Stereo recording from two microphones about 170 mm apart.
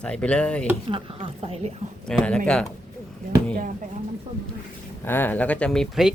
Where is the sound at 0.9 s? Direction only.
30° right (ahead or behind).